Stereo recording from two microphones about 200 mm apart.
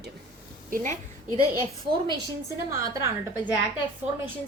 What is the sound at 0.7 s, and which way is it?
Speech, 40° right (ahead or behind).